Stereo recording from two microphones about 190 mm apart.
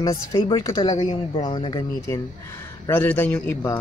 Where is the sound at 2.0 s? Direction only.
15° left (ahead or behind).